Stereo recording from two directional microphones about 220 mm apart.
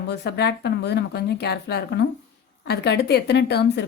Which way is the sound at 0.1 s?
50° left (ahead or behind).